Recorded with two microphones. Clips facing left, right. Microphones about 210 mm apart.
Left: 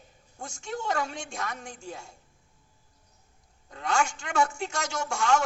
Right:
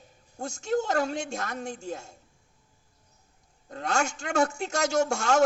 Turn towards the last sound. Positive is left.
turn(degrees=-40)  # may be behind; listen again after turning